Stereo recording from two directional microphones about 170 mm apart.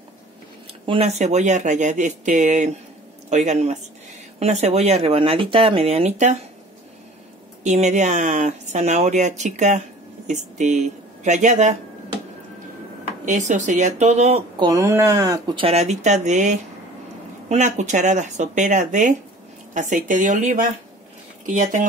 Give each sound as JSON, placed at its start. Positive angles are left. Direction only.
{"t": 0.8, "sound": "speech", "side_deg": -40}
{"t": 7.6, "sound": "speech", "side_deg": -45}
{"t": 13.2, "sound": "speech", "side_deg": -45}
{"t": 14.6, "sound": "speech", "side_deg": -20}
{"t": 15.6, "sound": "speech", "side_deg": -40}